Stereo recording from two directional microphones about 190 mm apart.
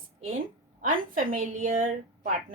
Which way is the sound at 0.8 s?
45° right (ahead or behind).